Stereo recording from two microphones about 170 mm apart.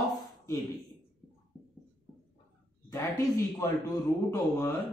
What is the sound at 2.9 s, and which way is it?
A man's voice, 20° left (ahead or behind).